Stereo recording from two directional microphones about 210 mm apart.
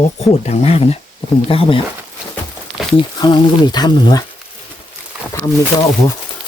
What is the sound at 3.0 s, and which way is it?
Speech, 20° left (ahead or behind).